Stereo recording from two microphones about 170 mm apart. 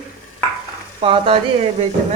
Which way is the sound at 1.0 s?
30° right (ahead or behind).